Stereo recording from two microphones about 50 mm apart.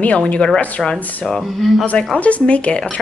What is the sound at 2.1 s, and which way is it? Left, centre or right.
Speech, left.